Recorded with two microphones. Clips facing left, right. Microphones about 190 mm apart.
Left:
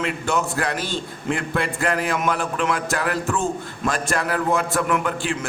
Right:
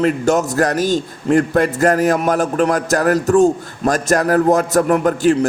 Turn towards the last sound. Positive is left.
turn(degrees=-40)  # may be behind; listen again after turning